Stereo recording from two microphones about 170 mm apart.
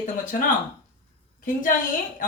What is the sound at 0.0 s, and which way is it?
A woman's voice, 55° left (ahead or behind).